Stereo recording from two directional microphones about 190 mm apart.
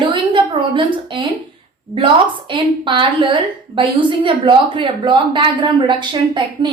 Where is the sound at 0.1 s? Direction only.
25° right (ahead or behind).